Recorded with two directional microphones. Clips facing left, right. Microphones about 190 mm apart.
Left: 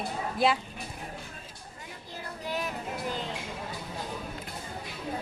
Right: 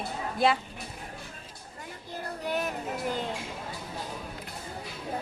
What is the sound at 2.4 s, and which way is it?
Music, 50° right (ahead or behind).